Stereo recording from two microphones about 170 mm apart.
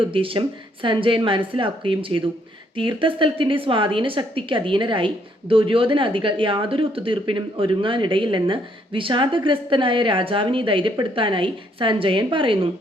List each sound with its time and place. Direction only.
0.1 s a woman's voice: 30° right (ahead or behind)